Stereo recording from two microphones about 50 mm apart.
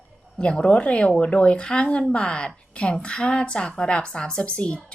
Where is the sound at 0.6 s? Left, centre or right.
Left.